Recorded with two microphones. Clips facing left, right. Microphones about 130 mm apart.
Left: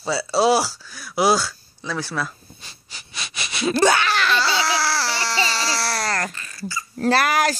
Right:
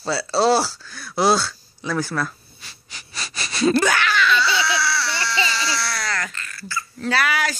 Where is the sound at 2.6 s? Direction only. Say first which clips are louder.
Even; 25° left (ahead or behind).